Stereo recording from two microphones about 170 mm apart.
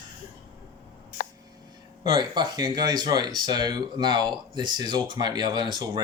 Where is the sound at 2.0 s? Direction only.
25° right (ahead or behind).